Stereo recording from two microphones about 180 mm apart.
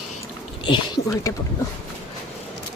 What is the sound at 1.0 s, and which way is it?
Speech, 60° left (ahead or behind).